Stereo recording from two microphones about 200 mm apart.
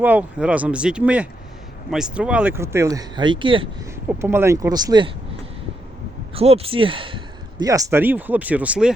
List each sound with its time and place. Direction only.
0.0 s speech: 10° right (ahead or behind); by 3.7 s 25° right (ahead or behind)
4.2 s speech: 10° right (ahead or behind)
6.3 s speech: 30° right (ahead or behind); by 8.9 s 5° right (ahead or behind)